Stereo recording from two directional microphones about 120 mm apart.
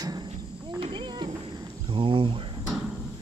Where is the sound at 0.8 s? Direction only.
45° right (ahead or behind).